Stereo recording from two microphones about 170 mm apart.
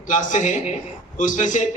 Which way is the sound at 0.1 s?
50° left (ahead or behind).